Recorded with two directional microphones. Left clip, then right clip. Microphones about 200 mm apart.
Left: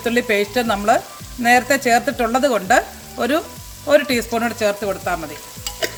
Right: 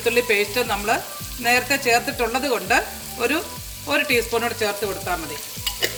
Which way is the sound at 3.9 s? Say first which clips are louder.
Left 4 dB; 50° left (ahead or behind).